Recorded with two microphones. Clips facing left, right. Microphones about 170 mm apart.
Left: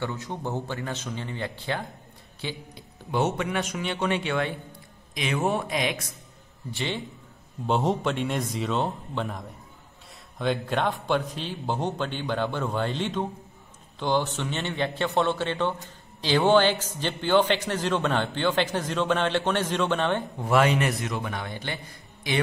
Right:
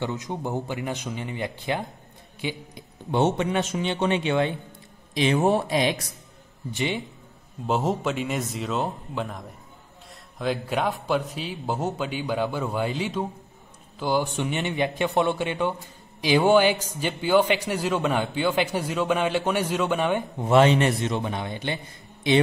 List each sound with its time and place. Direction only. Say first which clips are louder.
0.0 s a man's voice: right 2 dB; 20° right (ahead or behind)
5.1 s speech: right 5 dB; 30° right (ahead or behind)
6.7 s a man's voice: right 3 dB; 15° right (ahead or behind)
7.6 s a man's voice: even; centre (ahead or behind); by 21.7 s 20° right (ahead or behind)